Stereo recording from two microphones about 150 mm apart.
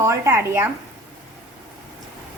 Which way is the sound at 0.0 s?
20° right (ahead or behind).